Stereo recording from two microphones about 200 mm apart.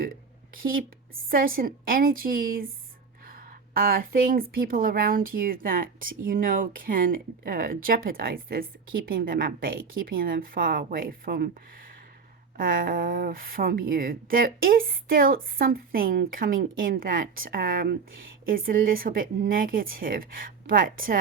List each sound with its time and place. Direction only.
1.3 s speech: 45° right (ahead or behind)
3.8 s speech: 45° right (ahead or behind)
12.5 s speech: 45° right (ahead or behind)